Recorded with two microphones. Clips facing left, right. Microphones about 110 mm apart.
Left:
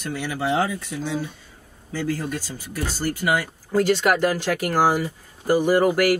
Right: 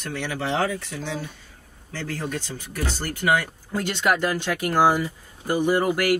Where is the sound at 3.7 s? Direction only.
5° left (ahead or behind).